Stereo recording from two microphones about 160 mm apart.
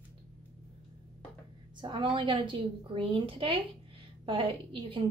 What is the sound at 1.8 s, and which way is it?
A woman's voice, 30° right (ahead or behind).